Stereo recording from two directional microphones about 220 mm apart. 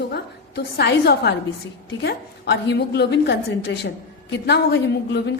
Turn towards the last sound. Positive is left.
turn(degrees=50)  # may be behind; listen again after turning